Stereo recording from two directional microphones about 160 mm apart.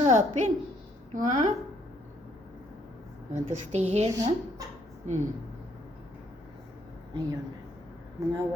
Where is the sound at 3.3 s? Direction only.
45° right (ahead or behind).